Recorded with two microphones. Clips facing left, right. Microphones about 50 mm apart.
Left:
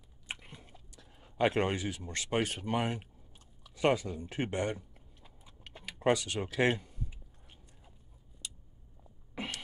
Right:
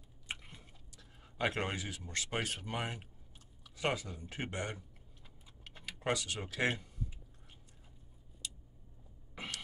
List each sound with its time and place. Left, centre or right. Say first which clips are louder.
0.5 s speech: left 4 dB; left